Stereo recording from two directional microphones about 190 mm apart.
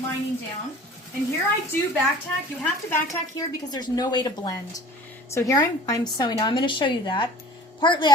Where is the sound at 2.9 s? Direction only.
15° left (ahead or behind).